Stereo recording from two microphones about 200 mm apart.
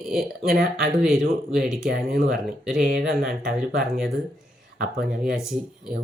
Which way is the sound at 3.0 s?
50° right (ahead or behind).